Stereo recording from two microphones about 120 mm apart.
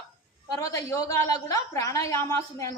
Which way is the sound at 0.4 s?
30° left (ahead or behind).